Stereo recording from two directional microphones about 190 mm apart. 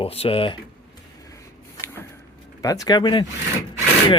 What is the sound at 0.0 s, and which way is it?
Speech, 30° left (ahead or behind).